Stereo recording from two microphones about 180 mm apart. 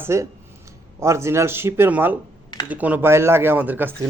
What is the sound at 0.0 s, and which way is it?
Speech, 15° right (ahead or behind).